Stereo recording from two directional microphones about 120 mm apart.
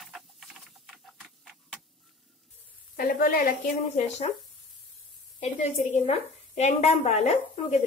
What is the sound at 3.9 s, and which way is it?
Speech, 65° left (ahead or behind).